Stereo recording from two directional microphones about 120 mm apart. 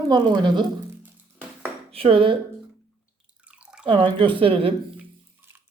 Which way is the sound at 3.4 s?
10° right (ahead or behind).